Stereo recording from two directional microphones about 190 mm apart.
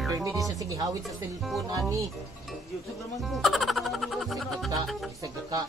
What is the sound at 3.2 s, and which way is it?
Music, centre (ahead or behind).